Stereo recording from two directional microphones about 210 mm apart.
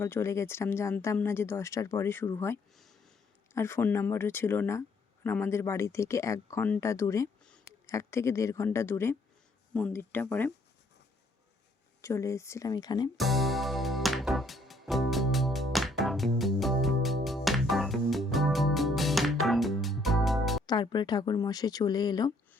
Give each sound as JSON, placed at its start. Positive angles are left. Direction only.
{"t": 0.0, "sound": "speech", "side_deg": 10}
{"t": 2.7, "sound": "a sound", "side_deg": 0}
{"t": 3.5, "sound": "speech", "side_deg": 10}
{"t": 12.0, "sound": "speech", "side_deg": 15}
{"t": 13.1, "sound": "music", "side_deg": 0}
{"t": 20.7, "sound": "speech", "side_deg": 20}